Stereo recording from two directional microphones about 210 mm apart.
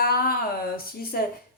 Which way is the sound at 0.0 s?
45° left (ahead or behind).